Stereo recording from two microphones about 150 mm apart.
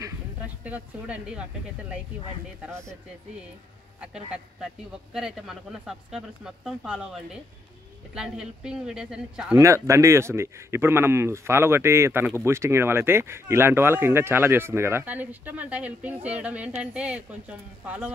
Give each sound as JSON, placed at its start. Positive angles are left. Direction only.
{"t": 0.7, "sound": "speech", "side_deg": -10}
{"t": 4.0, "sound": "speech", "side_deg": -5}
{"t": 9.6, "sound": "speech", "side_deg": -20}